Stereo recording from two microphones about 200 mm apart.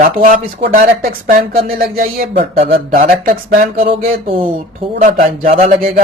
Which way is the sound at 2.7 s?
45° right (ahead or behind).